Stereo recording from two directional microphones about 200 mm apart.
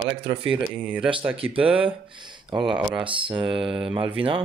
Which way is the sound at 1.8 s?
25° right (ahead or behind).